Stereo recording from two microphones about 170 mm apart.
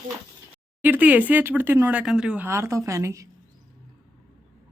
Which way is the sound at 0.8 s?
10° right (ahead or behind).